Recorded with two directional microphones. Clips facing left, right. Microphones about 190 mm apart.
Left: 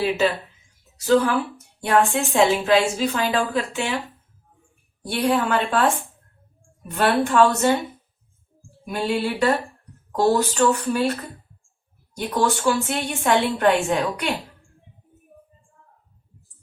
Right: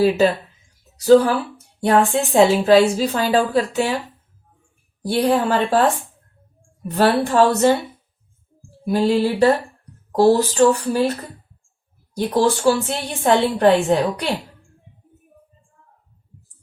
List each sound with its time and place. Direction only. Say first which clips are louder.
0.9 s a woman's voice: right 6 dB; 35° right (ahead or behind)
5.1 s a woman's voice: right 3 dB; 35° right (ahead or behind)
6.9 s a woman's voice: right 3 dB; 35° right (ahead or behind)
8.8 s a woman's voice: right 6 dB; 35° right (ahead or behind)
12.1 s a woman's voice: right 4 dB; 35° right (ahead or behind)